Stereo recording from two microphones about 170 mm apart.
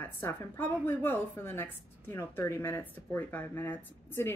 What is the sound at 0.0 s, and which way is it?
A woman's voice, 15° left (ahead or behind).